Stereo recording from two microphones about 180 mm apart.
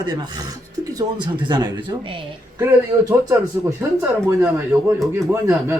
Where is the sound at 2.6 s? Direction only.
15° right (ahead or behind).